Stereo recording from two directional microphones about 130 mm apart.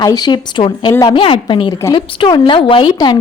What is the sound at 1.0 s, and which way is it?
A woman's voice, 45° left (ahead or behind).